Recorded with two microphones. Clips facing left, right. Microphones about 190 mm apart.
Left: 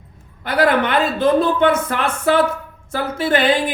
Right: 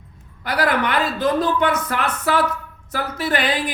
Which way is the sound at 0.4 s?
25° left (ahead or behind).